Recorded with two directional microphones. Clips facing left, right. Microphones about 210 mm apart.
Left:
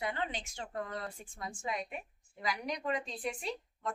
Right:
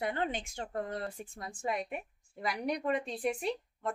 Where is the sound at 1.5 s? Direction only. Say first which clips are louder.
Right 4 dB; 60° right (ahead or behind).